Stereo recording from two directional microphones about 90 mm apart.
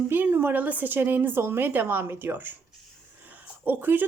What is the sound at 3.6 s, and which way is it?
Speech, 20° right (ahead or behind).